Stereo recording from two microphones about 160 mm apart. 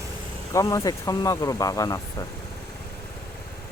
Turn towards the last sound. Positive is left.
turn(degrees=20)  # may be behind; listen again after turning